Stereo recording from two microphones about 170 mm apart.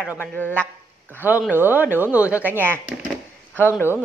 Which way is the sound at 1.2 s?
10° right (ahead or behind).